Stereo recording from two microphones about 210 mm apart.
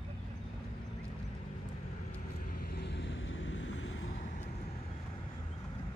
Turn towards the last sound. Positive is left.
turn(degrees=35)  # may be behind; listen again after turning